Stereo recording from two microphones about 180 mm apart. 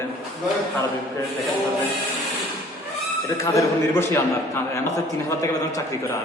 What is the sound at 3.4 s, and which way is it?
A man's voice, 15° left (ahead or behind).